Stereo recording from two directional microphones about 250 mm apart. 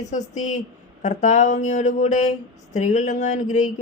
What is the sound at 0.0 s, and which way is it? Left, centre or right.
Speech, left.